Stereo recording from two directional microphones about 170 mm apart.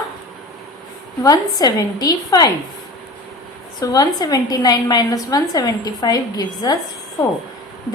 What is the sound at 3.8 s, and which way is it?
A woman's voice, 20° left (ahead or behind).